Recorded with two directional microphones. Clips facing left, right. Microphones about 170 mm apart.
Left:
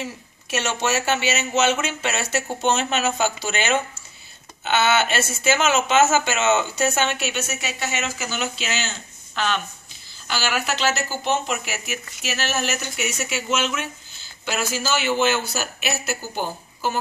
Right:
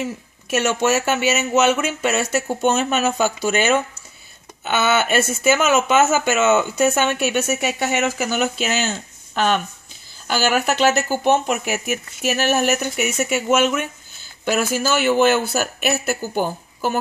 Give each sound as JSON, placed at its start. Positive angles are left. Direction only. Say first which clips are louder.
{"t": 0.7, "sound": "speech", "louder": "right 4 dB", "side_deg": -50}